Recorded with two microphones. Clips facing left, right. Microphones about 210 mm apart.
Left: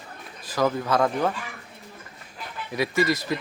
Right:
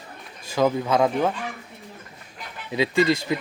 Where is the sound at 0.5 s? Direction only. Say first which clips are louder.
Right 2 dB; 20° right (ahead or behind).